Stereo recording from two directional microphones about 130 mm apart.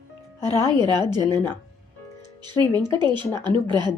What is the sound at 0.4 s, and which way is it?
Speech, 35° right (ahead or behind).